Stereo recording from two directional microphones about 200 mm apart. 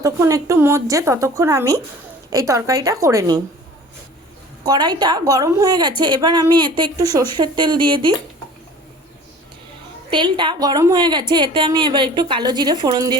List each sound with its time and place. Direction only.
0.0 s speech: 15° right (ahead or behind)
4.6 s a woman's voice: 20° right (ahead or behind)
10.1 s a woman's voice: 25° right (ahead or behind)